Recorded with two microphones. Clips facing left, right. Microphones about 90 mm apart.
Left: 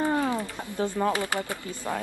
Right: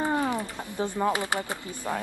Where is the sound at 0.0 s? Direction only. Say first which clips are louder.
Left 1 dB; 20° right (ahead or behind).